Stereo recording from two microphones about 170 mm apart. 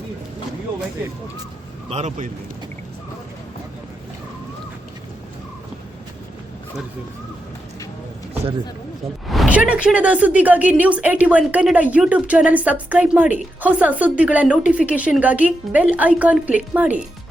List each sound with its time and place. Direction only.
1.9 s speech: 40° right (ahead or behind)
9.2 s speech: centre (ahead or behind)